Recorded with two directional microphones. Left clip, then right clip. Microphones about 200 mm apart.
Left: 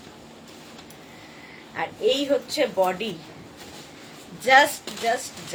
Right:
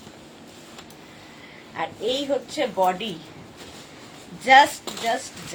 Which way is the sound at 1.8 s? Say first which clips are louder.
Left 3 dB; 20° left (ahead or behind).